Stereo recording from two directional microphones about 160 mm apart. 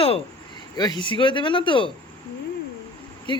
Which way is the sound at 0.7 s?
25° left (ahead or behind).